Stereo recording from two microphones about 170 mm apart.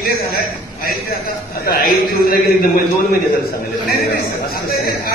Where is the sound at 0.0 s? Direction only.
65° left (ahead or behind).